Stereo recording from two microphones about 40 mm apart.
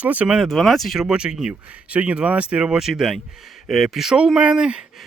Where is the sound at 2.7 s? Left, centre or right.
Centre.